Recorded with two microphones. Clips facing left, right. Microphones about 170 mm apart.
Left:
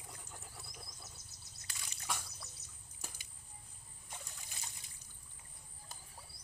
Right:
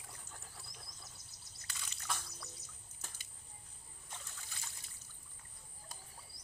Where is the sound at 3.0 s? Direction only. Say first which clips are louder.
Left 3 dB; 10° left (ahead or behind).